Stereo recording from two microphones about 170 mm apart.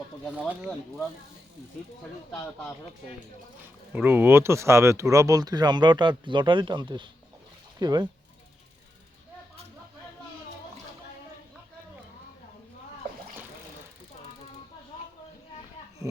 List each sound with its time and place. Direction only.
0.3 s speech: 10° right (ahead or behind)
3.9 s speech: 10° right (ahead or behind)